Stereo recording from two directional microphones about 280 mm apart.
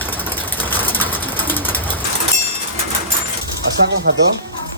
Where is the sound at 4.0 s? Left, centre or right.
Right.